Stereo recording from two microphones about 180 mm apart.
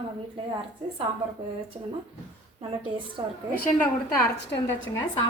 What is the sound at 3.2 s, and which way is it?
Speech, 20° right (ahead or behind).